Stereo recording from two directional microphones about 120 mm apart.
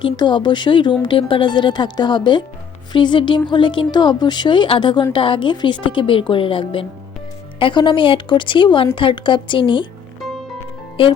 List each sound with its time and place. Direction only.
0.0 s a woman's voice: 40° left (ahead or behind)
10.2 s music: centre (ahead or behind)
11.0 s a woman's voice: 45° left (ahead or behind)